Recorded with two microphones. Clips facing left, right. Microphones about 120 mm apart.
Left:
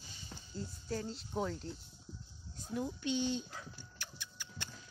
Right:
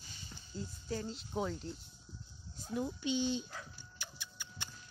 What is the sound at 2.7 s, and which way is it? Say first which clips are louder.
Speech: right 1 dB; 15° right (ahead or behind).